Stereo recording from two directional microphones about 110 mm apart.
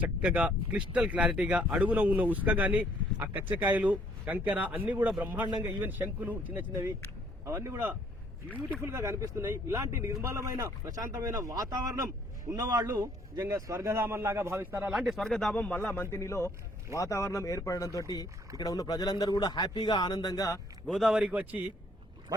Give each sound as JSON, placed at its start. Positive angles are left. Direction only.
{"t": 0.0, "sound": "a man's voice", "side_deg": -10}
{"t": 14.8, "sound": "a man's voice", "side_deg": -5}
{"t": 15.5, "sound": "speech", "side_deg": 15}
{"t": 20.8, "sound": "a man's voice", "side_deg": 0}